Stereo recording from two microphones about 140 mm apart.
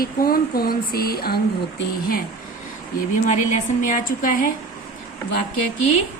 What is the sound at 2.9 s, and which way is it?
A woman's voice, 75° left (ahead or behind).